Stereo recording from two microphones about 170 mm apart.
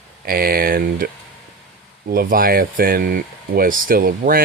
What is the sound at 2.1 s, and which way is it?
Speech, 55° right (ahead or behind).